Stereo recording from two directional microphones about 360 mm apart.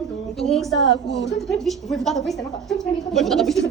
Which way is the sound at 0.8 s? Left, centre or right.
Left.